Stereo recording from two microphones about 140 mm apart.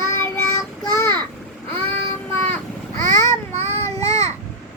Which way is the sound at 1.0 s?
15° left (ahead or behind).